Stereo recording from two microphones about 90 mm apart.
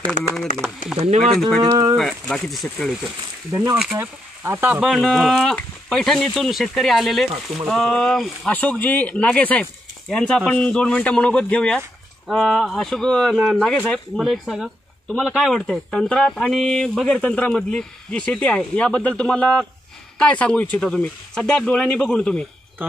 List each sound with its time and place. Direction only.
0.4 s speech: 5° right (ahead or behind)
1.7 s speech: 50° right (ahead or behind)
2.0 s speech: 5° left (ahead or behind)
4.0 s speech: 25° right (ahead or behind)
4.9 s speech: centre (ahead or behind)
8.5 s speech: 15° left (ahead or behind)
14.1 s speech: 5° right (ahead or behind)
15.7 s speech: 5° left (ahead or behind)